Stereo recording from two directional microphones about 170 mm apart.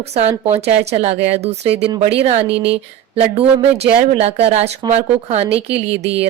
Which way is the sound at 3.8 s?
35° right (ahead or behind).